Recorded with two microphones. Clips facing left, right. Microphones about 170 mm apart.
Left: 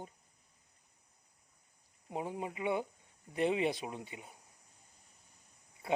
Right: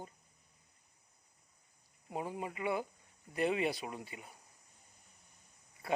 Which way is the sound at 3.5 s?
5° right (ahead or behind).